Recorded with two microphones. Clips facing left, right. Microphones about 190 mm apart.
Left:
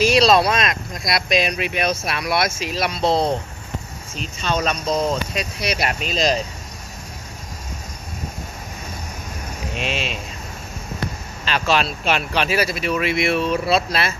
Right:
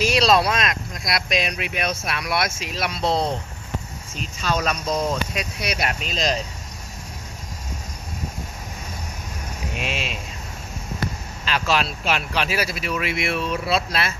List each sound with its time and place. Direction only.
0.0 s speech: centre (ahead or behind)
3.0 s speech: 30° left (ahead or behind)
4.2 s speech: centre (ahead or behind)
4.7 s speech: 25° left (ahead or behind)
5.3 s speech: centre (ahead or behind)
9.8 s speech: 5° right (ahead or behind)
11.4 s speech: centre (ahead or behind)